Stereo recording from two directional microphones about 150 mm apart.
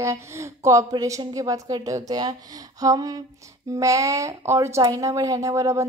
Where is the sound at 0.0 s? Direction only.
20° right (ahead or behind).